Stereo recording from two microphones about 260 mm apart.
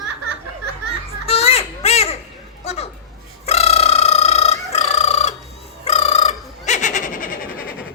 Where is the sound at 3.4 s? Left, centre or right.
Left.